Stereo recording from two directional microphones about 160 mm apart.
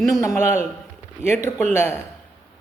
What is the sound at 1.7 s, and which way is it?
Speech, 15° left (ahead or behind).